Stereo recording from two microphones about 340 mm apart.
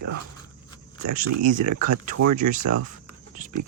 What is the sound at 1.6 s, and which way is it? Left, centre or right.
Speech, right.